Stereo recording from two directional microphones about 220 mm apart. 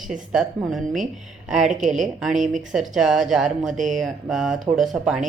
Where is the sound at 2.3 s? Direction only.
35° right (ahead or behind).